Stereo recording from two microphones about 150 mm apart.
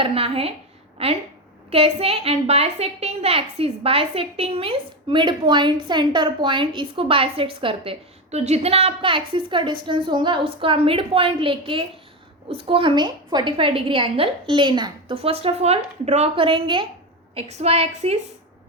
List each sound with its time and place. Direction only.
0.0 s a woman's voice: 40° right (ahead or behind)
17.3 s a woman's voice: 45° right (ahead or behind)